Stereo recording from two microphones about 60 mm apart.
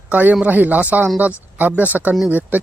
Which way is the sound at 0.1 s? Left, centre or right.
Right.